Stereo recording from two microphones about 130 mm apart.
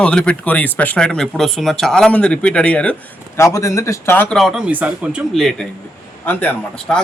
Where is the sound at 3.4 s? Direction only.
25° left (ahead or behind).